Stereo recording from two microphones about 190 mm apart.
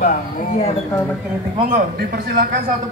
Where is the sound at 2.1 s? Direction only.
50° right (ahead or behind).